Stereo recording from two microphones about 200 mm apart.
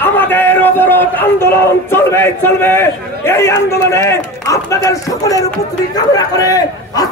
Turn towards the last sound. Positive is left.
turn(degrees=20)  # may be behind; listen again after turning